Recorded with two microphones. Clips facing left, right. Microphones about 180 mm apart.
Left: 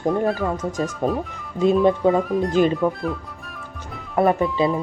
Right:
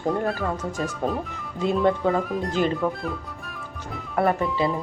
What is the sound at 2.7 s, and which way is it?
Music, centre (ahead or behind).